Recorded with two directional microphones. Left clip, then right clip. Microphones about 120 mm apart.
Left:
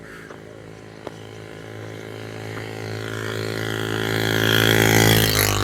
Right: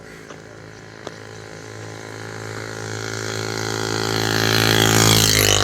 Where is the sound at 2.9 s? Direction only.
90° left; by 4.2 s 65° left (ahead or behind).